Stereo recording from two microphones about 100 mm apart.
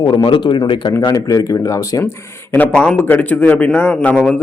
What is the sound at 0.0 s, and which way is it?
Speech, 50° left (ahead or behind).